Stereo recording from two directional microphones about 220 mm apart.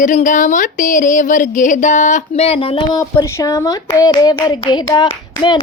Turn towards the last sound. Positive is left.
turn(degrees=15)  # may be behind; listen again after turning